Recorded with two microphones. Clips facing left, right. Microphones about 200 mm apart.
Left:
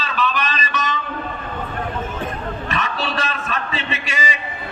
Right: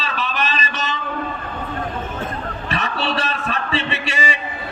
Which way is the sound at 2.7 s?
30° right (ahead or behind).